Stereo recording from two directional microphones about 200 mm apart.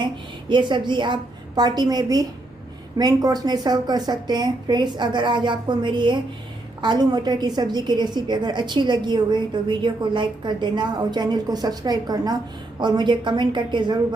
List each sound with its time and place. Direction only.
0.0 s a woman's voice: 25° right (ahead or behind)